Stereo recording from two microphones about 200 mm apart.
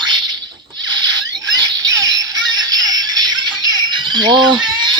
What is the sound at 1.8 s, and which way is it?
Synthetic singing, 15° right (ahead or behind).